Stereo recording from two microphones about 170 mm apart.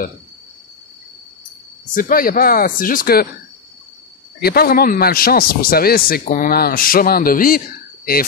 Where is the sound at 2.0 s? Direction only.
55° left (ahead or behind).